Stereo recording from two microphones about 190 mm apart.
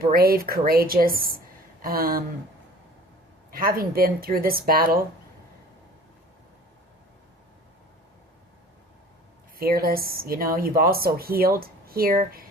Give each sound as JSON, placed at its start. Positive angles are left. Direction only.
{"t": 0.0, "sound": "speech", "side_deg": -50}
{"t": 3.5, "sound": "speech", "side_deg": -50}
{"t": 9.6, "sound": "speech", "side_deg": -50}